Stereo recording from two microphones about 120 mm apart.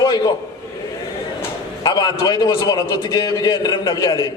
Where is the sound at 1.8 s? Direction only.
35° left (ahead or behind).